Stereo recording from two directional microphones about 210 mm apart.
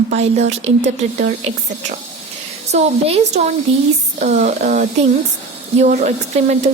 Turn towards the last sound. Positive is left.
turn(degrees=-30)  # may be behind; listen again after turning